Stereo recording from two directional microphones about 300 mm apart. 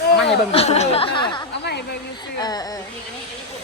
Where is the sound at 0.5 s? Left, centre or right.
Left.